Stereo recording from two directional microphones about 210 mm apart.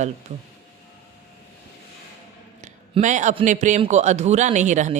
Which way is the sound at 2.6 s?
35° right (ahead or behind).